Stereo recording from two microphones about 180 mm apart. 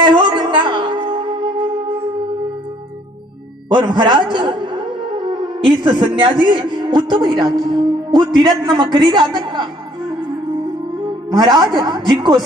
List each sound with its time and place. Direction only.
0.0 s music: 25° right (ahead or behind)
3.6 s music: 25° right (ahead or behind)
5.9 s a man's voice: 30° right (ahead or behind)
11.1 s a woman's voice: 20° right (ahead or behind)